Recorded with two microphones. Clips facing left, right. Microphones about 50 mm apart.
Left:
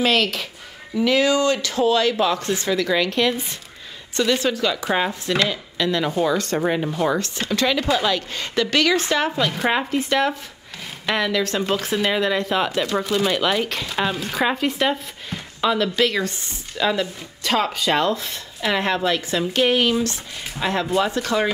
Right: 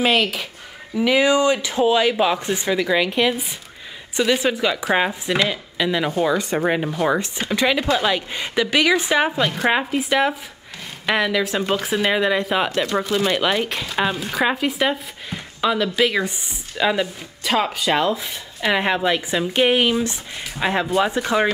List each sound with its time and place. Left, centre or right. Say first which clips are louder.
0.0 s speech: right 1 dB; centre
9.3 s speech: right 1 dB; centre